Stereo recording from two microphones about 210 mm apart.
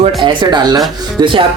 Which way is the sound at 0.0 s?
25° right (ahead or behind).